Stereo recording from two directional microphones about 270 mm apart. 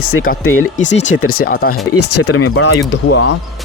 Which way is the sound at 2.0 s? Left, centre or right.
Left.